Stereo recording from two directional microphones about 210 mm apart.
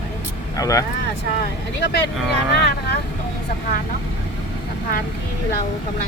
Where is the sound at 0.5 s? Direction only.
15° left (ahead or behind).